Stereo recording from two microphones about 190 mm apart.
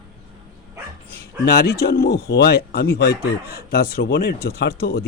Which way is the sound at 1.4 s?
55° left (ahead or behind).